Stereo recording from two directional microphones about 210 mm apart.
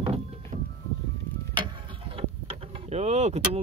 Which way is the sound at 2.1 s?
30° right (ahead or behind).